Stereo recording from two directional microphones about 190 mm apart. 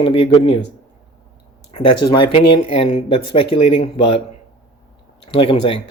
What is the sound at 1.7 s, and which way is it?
Speech, 25° left (ahead or behind).